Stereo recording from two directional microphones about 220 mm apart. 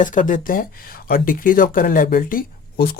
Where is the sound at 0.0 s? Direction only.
35° left (ahead or behind).